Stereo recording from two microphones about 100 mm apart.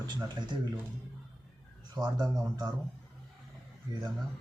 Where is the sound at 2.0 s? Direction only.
45° right (ahead or behind).